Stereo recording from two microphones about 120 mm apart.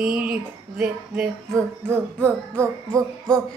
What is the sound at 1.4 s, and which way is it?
Speech, 20° right (ahead or behind).